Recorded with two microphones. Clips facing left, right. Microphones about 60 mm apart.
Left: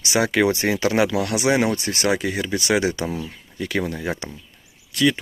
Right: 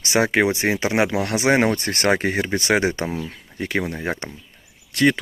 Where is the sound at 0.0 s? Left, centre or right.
Right.